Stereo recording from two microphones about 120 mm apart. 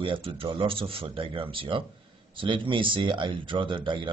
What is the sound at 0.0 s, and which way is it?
Speech, 45° right (ahead or behind).